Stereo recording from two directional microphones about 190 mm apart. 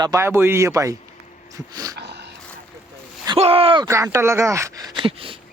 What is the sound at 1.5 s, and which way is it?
Dog, 20° right (ahead or behind).